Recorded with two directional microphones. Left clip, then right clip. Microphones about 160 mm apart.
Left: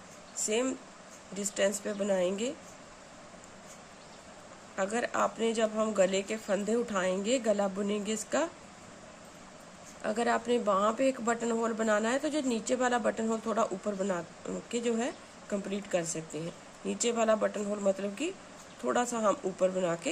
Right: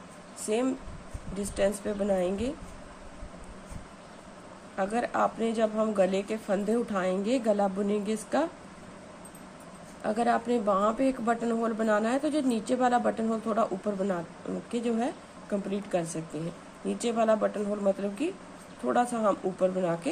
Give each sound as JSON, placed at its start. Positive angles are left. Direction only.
{"t": 0.5, "sound": "a man's voice", "side_deg": 15}
{"t": 4.7, "sound": "a man's voice", "side_deg": 15}
{"t": 10.0, "sound": "a man's voice", "side_deg": 15}